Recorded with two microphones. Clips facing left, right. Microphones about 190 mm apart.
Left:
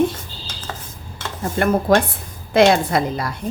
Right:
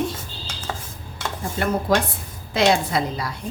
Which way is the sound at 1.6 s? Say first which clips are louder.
Left 5 dB; 55° left (ahead or behind).